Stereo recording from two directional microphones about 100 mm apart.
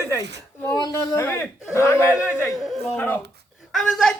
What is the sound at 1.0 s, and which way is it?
A man's voice, 25° left (ahead or behind).